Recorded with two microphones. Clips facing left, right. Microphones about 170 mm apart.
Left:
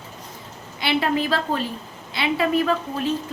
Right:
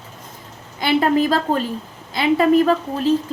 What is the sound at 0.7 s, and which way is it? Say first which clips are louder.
A woman's voice: right 5 dB; 45° right (ahead or behind).